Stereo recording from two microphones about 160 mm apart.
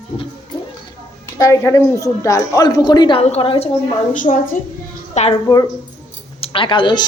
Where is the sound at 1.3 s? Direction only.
20° left (ahead or behind); by 5.3 s 45° left (ahead or behind).